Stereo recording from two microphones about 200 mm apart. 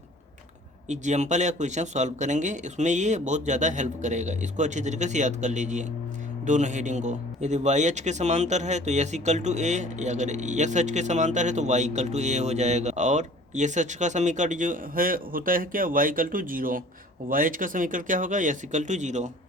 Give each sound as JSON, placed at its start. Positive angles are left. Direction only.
{"t": 0.9, "sound": "a man's voice", "side_deg": -35}